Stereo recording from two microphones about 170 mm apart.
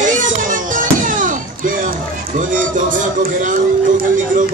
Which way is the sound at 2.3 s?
50° right (ahead or behind).